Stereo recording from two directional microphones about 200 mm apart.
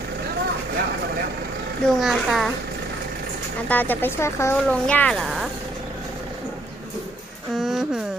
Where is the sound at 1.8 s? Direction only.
Centre (ahead or behind).